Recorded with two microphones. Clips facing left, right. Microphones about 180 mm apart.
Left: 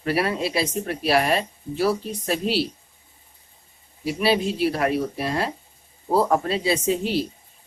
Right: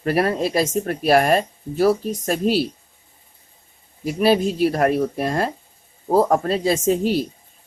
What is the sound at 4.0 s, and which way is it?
Speech, 45° right (ahead or behind).